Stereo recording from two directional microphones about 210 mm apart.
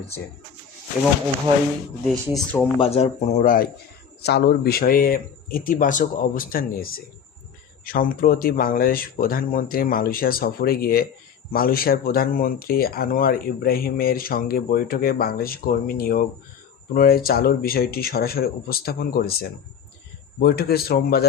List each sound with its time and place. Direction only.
2.0 s speech: 5° left (ahead or behind)
2.7 s speech: 25° left (ahead or behind)
4.2 s speech: 50° left (ahead or behind)